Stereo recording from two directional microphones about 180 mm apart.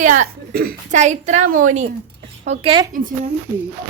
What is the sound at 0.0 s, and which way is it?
A woman's voice, 45° right (ahead or behind).